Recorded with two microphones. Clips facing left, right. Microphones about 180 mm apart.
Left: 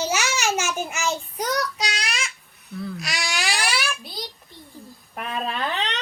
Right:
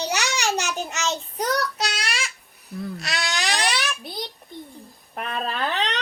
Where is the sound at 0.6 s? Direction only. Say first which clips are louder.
Left 1 dB; 20° right (ahead or behind).